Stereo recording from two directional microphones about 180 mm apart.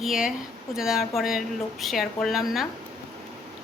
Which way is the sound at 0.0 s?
5° right (ahead or behind).